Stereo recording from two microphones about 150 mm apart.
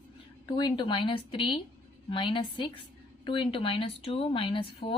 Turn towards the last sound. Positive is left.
turn(degrees=40)  # may be behind; listen again after turning